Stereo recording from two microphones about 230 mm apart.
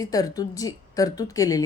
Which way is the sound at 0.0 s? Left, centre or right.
Centre.